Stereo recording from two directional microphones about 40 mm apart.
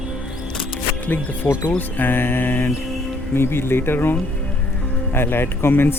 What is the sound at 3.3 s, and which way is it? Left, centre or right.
Speech, left.